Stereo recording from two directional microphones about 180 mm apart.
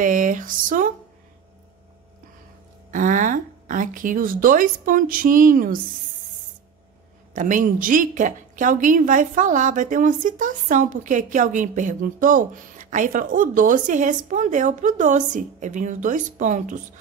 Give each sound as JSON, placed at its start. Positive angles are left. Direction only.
{"t": 0.0, "sound": "speech", "side_deg": -45}
{"t": 2.9, "sound": "speech", "side_deg": -45}
{"t": 7.3, "sound": "a woman's voice", "side_deg": -45}